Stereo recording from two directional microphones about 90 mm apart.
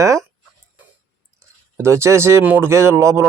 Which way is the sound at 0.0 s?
35° right (ahead or behind).